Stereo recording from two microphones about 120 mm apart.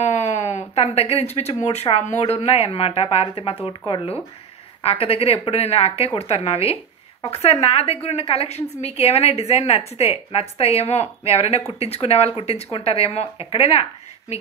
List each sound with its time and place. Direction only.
0.0 s speech: 70° left (ahead or behind)